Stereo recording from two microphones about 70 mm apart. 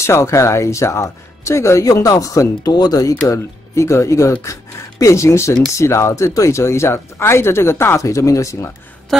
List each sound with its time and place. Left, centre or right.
0.0 s speech: left
2.0 s speech: left
2.7 s speech: left
8.0 s speech: left